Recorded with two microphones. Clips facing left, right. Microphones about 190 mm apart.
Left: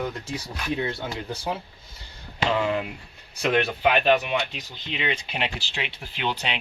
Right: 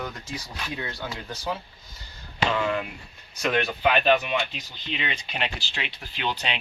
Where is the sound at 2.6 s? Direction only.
25° left (ahead or behind).